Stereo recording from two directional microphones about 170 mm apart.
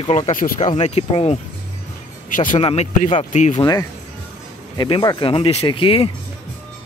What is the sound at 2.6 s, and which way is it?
Speech, 40° left (ahead or behind).